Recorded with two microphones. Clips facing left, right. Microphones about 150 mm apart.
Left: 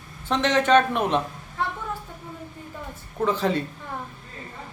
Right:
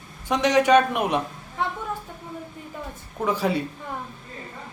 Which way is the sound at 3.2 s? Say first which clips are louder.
Left 1 dB; 10° right (ahead or behind).